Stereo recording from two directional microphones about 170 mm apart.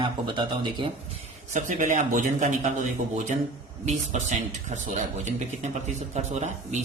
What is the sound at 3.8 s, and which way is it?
A man's voice, 45° right (ahead or behind).